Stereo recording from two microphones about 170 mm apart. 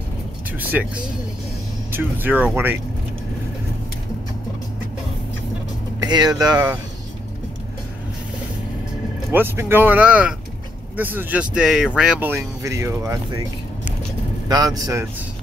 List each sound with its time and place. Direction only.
0.6 s speech: 10° right (ahead or behind)
6.0 s speech: 25° right (ahead or behind)
9.3 s speech: 10° right (ahead or behind)
14.5 s speech: 20° right (ahead or behind)